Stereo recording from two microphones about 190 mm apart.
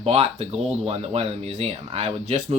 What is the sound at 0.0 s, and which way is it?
Speech, 30° right (ahead or behind).